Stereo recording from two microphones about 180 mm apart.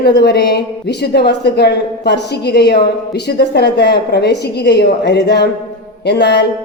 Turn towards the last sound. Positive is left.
turn(degrees=65)  # may be behind; listen again after turning